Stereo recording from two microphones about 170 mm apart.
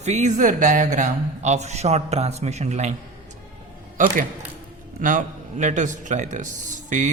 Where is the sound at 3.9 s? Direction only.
55° right (ahead or behind).